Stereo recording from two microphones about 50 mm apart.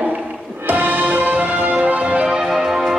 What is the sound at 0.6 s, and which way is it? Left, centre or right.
Music, right.